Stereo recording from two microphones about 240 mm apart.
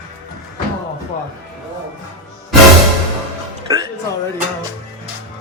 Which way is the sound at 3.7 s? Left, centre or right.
Centre.